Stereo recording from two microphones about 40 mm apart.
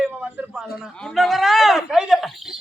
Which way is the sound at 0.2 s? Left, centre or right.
Right.